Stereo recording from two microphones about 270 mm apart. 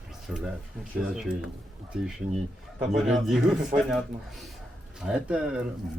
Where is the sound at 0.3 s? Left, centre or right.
Centre.